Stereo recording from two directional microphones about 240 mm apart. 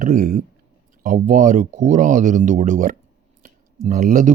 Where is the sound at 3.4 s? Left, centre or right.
Right.